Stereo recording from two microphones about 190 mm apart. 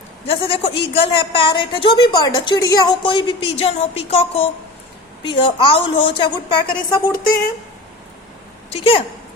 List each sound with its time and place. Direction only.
0.3 s a woman's voice: 30° left (ahead or behind)
8.7 s a woman's voice: 30° left (ahead or behind)